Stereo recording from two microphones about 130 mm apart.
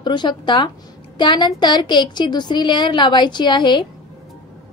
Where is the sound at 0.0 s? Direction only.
35° left (ahead or behind).